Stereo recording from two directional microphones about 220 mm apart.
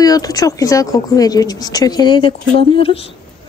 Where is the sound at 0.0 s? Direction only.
15° left (ahead or behind).